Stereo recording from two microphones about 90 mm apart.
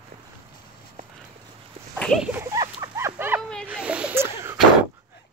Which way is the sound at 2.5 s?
40° right (ahead or behind).